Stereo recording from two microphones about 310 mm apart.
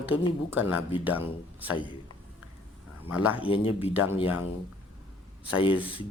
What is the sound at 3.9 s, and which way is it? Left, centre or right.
Speech, centre.